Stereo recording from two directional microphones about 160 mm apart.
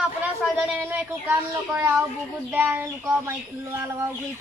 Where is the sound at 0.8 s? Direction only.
10° right (ahead or behind).